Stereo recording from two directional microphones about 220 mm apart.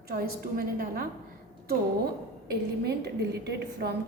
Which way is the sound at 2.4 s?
50° right (ahead or behind).